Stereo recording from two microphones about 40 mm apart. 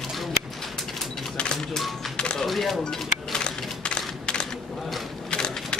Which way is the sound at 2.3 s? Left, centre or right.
Centre.